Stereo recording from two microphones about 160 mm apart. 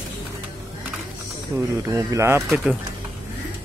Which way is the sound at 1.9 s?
20° right (ahead or behind).